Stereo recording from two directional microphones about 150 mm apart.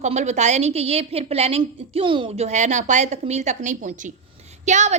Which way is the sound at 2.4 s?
50° right (ahead or behind).